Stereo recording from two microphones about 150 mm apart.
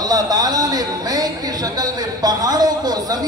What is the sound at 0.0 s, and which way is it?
A woman's voice, 25° right (ahead or behind).